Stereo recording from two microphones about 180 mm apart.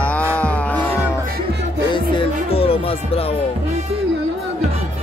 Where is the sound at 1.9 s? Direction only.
30° left (ahead or behind).